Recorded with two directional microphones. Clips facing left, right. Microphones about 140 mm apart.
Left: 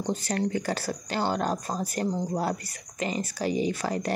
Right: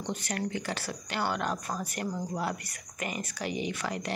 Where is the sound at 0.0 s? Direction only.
35° left (ahead or behind).